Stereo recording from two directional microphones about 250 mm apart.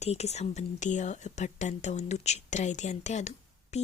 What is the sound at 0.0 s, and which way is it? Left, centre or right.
A woman's voice, left.